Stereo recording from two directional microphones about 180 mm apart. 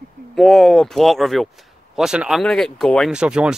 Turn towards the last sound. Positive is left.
turn(degrees=-5)  # may be behind; listen again after turning